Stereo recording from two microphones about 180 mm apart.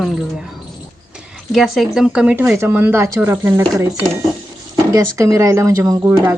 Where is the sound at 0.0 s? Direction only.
Centre (ahead or behind).